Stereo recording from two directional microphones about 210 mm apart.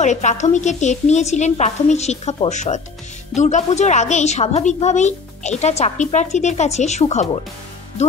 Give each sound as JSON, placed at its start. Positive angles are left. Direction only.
{"t": 0.0, "sound": "a woman's voice", "side_deg": 35}